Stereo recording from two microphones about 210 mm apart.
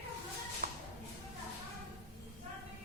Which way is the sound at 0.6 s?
40° right (ahead or behind).